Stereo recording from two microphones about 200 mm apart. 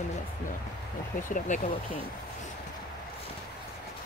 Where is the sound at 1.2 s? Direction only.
40° left (ahead or behind).